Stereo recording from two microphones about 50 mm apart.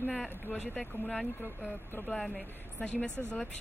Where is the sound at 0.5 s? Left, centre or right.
Left.